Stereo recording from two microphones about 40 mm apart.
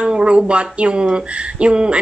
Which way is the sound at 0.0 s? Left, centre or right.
Right.